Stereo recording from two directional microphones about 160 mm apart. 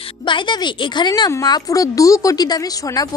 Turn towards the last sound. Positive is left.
turn(degrees=25)  # may be behind; listen again after turning